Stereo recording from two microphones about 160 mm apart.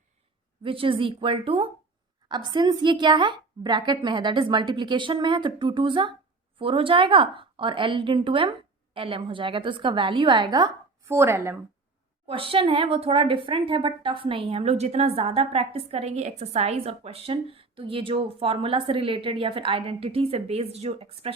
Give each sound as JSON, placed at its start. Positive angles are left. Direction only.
{"t": 0.6, "sound": "a woman's voice", "side_deg": -35}
{"t": 12.3, "sound": "a woman's voice", "side_deg": -35}